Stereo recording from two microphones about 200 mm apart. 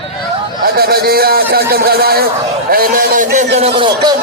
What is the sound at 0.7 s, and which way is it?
A man's voice, 50° right (ahead or behind).